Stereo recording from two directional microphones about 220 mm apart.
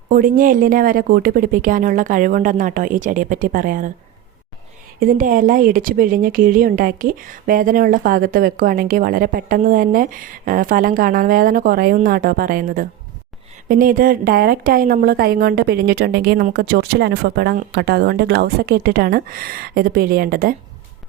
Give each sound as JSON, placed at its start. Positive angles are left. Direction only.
{"t": 0.1, "sound": "speech", "side_deg": -40}
{"t": 4.9, "sound": "a woman's voice", "side_deg": -40}